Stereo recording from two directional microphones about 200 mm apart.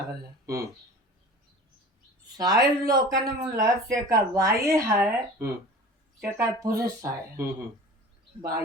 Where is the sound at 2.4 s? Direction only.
20° right (ahead or behind).